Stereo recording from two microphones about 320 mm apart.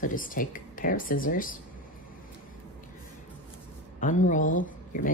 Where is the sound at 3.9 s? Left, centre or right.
Left.